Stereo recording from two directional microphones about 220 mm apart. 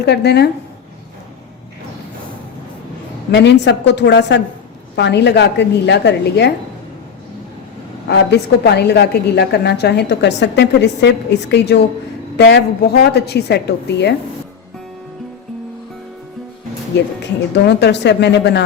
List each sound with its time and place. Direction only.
0.0 s a woman's voice: 50° left (ahead or behind)
3.3 s a woman's voice: 50° left (ahead or behind)
8.0 s a woman's voice: 50° left (ahead or behind)
16.9 s a woman's voice: 50° left (ahead or behind)